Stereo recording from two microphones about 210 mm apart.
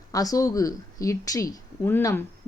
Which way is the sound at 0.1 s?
15° left (ahead or behind).